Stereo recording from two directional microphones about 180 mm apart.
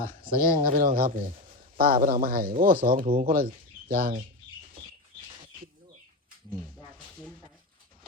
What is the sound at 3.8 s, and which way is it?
Chicken, 50° right (ahead or behind).